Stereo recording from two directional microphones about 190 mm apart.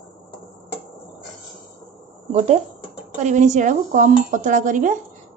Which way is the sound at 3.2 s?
40° right (ahead or behind).